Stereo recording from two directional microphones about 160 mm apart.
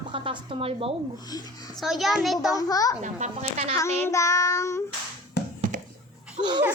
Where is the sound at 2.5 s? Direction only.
20° left (ahead or behind).